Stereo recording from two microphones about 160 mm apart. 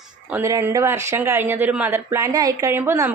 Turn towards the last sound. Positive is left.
turn(degrees=-15)  # may be behind; listen again after turning